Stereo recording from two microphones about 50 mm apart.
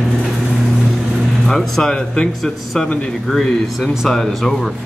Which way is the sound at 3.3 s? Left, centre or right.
Centre.